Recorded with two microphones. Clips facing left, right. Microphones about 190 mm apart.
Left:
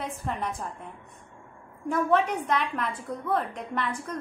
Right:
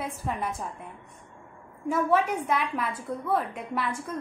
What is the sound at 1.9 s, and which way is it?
A woman's voice, 5° right (ahead or behind).